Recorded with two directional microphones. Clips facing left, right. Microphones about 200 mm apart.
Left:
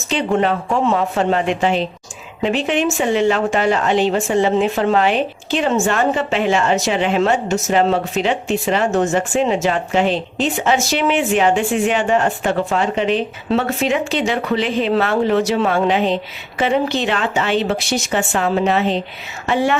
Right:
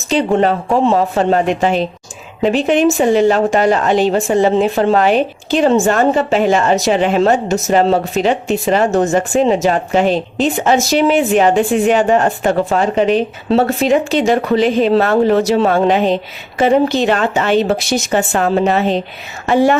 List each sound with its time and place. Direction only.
0.1 s a woman's voice: 35° right (ahead or behind)